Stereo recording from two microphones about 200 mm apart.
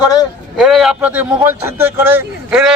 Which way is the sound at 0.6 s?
Centre (ahead or behind).